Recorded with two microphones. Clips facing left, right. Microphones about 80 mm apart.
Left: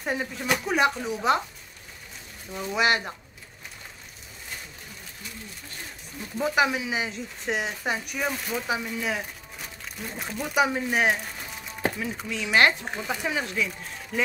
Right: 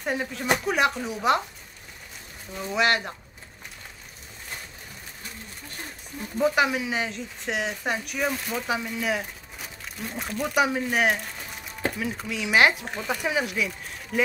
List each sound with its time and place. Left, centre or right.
0.0 s speech: centre
2.5 s speech: centre
6.3 s speech: centre
12.8 s speech: centre
13.1 s speech: centre